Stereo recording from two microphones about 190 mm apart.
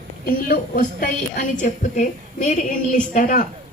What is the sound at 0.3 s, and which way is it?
A woman's voice, 50° left (ahead or behind).